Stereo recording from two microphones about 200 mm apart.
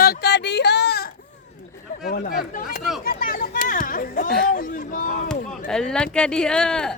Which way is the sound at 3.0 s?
45° left (ahead or behind).